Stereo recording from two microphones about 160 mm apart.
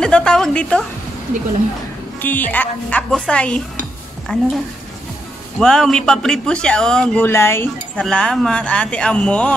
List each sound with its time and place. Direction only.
0.0 s a sound: 5° left (ahead or behind)
2.2 s speech: 10° left (ahead or behind)
5.6 s speech: 5° left (ahead or behind)
7.2 s speech: 15° left (ahead or behind)